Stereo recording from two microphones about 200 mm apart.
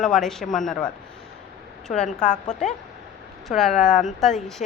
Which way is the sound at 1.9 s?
5° left (ahead or behind).